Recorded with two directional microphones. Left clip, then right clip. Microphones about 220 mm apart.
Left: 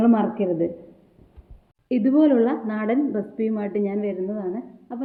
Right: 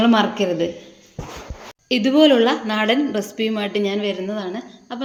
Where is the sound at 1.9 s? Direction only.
15° right (ahead or behind).